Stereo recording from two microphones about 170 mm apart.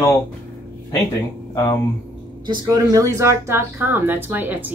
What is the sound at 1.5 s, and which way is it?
Speech, 20° left (ahead or behind).